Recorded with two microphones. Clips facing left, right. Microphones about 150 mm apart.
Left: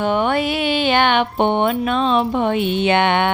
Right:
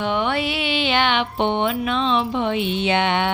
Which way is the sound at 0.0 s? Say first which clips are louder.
Left 4 dB; 45° left (ahead or behind).